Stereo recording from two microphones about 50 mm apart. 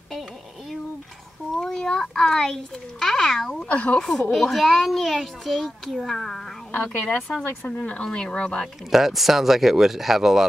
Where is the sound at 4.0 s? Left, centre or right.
Centre.